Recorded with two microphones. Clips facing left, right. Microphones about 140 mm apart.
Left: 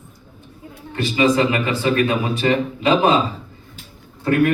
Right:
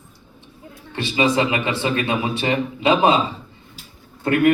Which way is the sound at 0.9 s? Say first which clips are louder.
Left 2 dB; 25° right (ahead or behind).